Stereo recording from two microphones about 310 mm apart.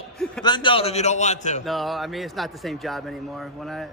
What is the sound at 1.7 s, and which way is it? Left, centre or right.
A man's voice, centre.